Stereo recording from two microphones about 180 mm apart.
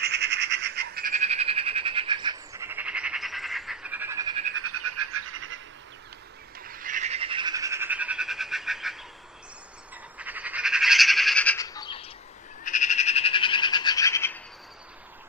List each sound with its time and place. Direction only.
0.0 s a sound: 65° right (ahead or behind)
1.1 s frog: 40° right (ahead or behind); by 4.4 s 15° right (ahead or behind)
6.6 s frog: 50° right (ahead or behind); by 11.5 s 5° left (ahead or behind)
11.5 s bird: 20° left (ahead or behind)
12.6 s bird: 45° left (ahead or behind); by 14.4 s 10° left (ahead or behind)